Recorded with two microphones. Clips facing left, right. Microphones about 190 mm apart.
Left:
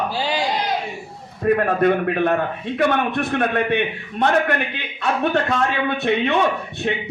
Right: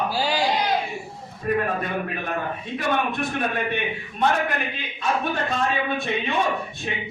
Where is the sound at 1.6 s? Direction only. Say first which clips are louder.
Left 7 dB; 65° left (ahead or behind).